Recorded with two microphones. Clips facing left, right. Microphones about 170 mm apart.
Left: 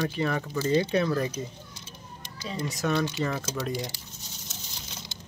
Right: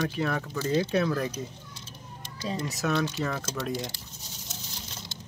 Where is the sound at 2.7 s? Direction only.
Centre (ahead or behind).